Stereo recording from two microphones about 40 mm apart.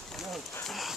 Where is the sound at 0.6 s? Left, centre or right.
Centre.